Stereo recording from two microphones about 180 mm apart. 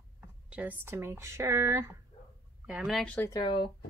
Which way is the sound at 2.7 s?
5° right (ahead or behind).